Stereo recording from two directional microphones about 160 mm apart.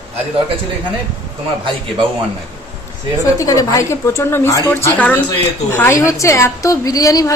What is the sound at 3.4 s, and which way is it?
A woman's voice, 20° left (ahead or behind).